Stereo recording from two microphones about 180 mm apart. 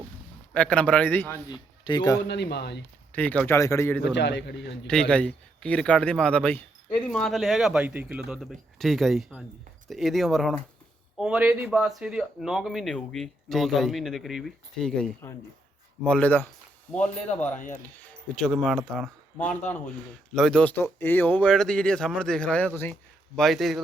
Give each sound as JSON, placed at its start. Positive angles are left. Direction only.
{"t": 0.5, "sound": "speech", "side_deg": 10}
{"t": 1.8, "sound": "speech", "side_deg": 25}
{"t": 2.2, "sound": "a man's voice", "side_deg": 70}
{"t": 3.1, "sound": "speech", "side_deg": 10}
{"t": 4.0, "sound": "a man's voice", "side_deg": 70}
{"t": 4.9, "sound": "speech", "side_deg": 5}
{"t": 20.3, "sound": "speech", "side_deg": 5}